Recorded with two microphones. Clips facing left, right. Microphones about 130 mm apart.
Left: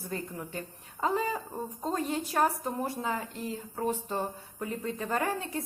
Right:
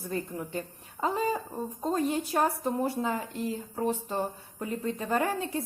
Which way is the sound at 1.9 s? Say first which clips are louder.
Right 4 dB; 20° right (ahead or behind).